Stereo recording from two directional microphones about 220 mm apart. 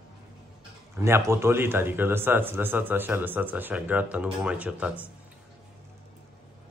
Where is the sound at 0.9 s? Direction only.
10° right (ahead or behind).